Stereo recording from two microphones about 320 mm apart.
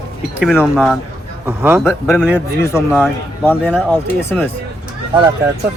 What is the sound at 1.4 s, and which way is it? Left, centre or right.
Speech, centre.